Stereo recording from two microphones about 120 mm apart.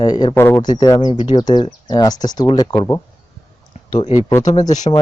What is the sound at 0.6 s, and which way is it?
Speech, 35° left (ahead or behind).